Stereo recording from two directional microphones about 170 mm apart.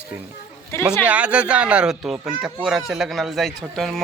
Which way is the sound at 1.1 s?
10° right (ahead or behind).